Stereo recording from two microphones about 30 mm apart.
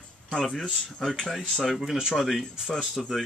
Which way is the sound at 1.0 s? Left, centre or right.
Centre.